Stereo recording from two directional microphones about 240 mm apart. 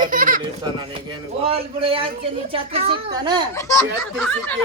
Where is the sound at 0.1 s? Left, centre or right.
Right.